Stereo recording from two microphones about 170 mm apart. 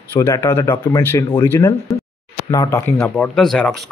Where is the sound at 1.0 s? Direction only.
10° left (ahead or behind).